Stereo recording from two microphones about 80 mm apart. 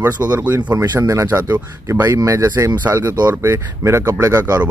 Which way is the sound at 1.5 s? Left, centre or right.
Right.